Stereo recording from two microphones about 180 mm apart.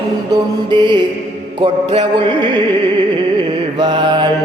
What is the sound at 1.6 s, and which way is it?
Mantra, 30° right (ahead or behind).